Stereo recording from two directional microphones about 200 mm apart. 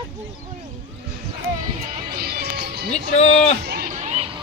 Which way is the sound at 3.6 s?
50° right (ahead or behind).